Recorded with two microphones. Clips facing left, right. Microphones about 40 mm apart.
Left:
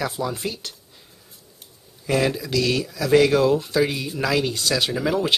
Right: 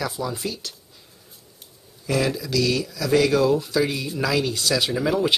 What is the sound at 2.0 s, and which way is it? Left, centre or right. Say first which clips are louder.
Speech: left 2 dB; left.